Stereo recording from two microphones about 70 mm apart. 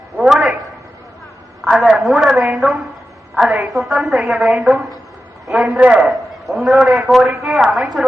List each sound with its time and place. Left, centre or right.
0.2 s a sound: centre
1.7 s a man's voice: centre
5.8 s a man's voice: centre
6.1 s a man's voice: centre